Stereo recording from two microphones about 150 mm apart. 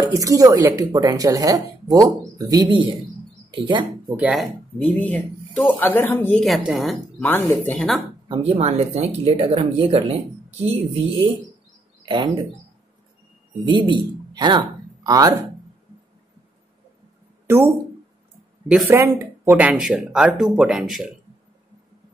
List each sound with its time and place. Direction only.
0.0 s speech: 20° right (ahead or behind)
4.2 s speech: 5° right (ahead or behind)
4.7 s speech: 10° left (ahead or behind)
6.4 s speech: centre (ahead or behind)
7.2 s speech: 15° left (ahead or behind)
8.3 s speech: 40° right (ahead or behind)
13.7 s speech: 30° right (ahead or behind)
18.9 s speech: 15° right (ahead or behind)